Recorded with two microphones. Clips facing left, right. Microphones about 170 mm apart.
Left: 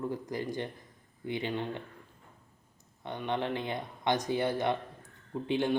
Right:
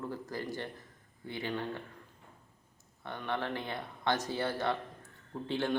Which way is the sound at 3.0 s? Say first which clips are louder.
Left 3 dB; 20° left (ahead or behind).